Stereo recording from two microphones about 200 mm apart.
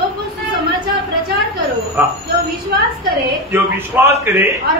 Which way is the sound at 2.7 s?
50° right (ahead or behind).